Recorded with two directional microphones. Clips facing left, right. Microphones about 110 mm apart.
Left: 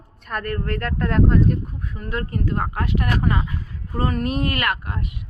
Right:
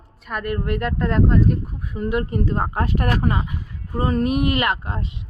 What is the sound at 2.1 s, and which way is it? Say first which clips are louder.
Speech: right 3 dB; 15° right (ahead or behind).